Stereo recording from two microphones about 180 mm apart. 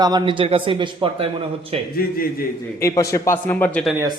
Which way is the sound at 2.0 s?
55° left (ahead or behind).